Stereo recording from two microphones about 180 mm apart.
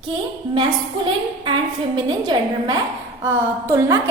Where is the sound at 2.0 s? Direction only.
25° right (ahead or behind).